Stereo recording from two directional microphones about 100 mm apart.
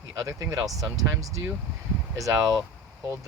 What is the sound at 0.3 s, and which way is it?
Speech, 35° right (ahead or behind).